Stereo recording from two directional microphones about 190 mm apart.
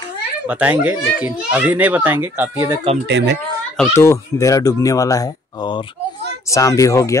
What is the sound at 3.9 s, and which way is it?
Speech, 15° left (ahead or behind).